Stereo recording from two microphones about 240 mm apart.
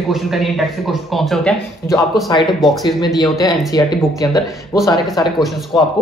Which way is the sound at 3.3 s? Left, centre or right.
Centre.